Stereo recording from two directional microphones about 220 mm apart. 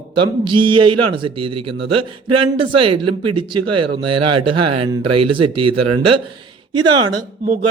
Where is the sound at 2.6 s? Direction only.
25° right (ahead or behind).